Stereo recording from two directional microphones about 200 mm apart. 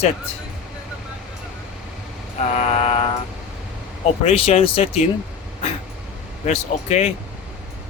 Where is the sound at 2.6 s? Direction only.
30° left (ahead or behind).